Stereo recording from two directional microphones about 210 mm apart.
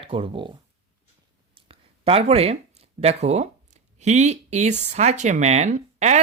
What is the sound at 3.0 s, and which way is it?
Speech, 30° right (ahead or behind).